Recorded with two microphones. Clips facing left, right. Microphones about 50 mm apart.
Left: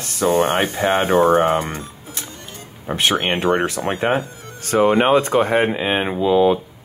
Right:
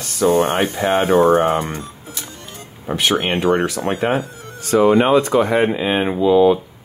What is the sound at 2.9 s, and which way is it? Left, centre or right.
Speech, left.